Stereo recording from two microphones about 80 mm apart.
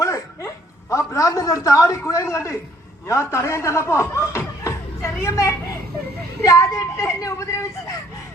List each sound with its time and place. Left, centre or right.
0.0 s a woman's voice: left